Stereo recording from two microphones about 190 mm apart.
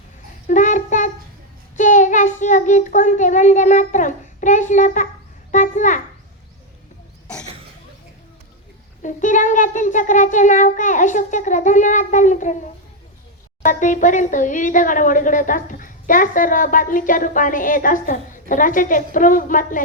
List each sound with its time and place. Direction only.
0.4 s child singing: 40° left (ahead or behind)
1.7 s a child's voice: 40° left (ahead or behind)
9.0 s a sound: 40° left (ahead or behind)
13.7 s speech: 40° left (ahead or behind)